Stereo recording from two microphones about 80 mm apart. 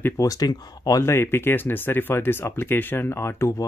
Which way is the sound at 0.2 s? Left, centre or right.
Left.